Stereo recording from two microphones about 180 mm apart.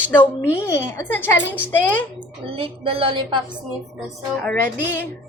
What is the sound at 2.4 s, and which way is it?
Speech, 30° right (ahead or behind).